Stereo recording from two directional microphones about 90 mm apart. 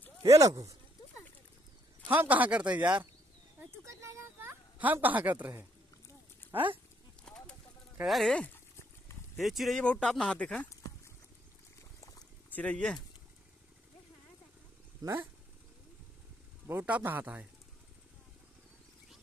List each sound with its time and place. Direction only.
0.3 s speech: 40° right (ahead or behind)
2.0 s speech: 20° right (ahead or behind)
3.8 s a sound: 30° right (ahead or behind)
7.2 s bird: 10° left (ahead or behind)
8.0 s speech: centre (ahead or behind)
8.3 s speech: 10° left (ahead or behind)
9.4 s speech: centre (ahead or behind)
9.8 s speech: 10° left (ahead or behind)
12.4 s speech: 15° left (ahead or behind)
16.6 s speech: 20° right (ahead or behind)